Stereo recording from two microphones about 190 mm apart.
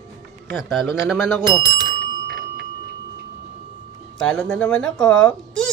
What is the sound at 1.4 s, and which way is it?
Speech, 20° right (ahead or behind).